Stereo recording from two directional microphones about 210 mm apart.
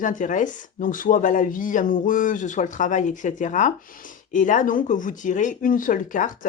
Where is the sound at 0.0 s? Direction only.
40° left (ahead or behind).